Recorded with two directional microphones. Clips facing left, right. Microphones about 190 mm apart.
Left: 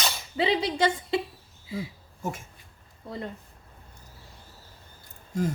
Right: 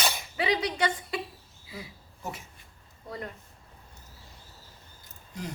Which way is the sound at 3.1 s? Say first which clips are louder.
Left 3 dB; 25° left (ahead or behind).